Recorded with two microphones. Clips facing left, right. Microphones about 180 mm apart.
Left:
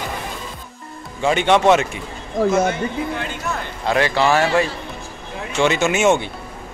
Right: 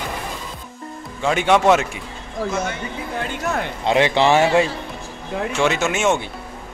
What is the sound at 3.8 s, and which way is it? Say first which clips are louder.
Speech: right 1 dB; 20° right (ahead or behind).